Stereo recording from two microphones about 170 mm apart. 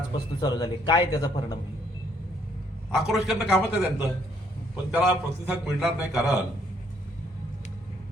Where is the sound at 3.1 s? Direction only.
5° right (ahead or behind).